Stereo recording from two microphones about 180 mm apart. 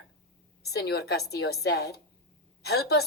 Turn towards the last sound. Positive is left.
turn(degrees=60)  # may be behind; listen again after turning